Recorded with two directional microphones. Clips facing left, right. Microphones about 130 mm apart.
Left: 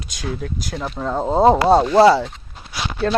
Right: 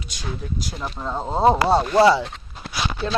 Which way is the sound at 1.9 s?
40° left (ahead or behind).